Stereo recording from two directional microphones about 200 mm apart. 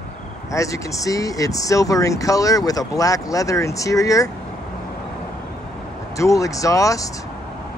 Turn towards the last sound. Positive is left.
turn(degrees=15)  # may be behind; listen again after turning